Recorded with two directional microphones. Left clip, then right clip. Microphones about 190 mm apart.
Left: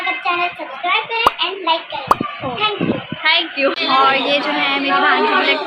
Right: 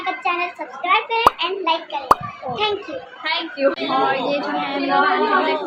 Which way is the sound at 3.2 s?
25° left (ahead or behind).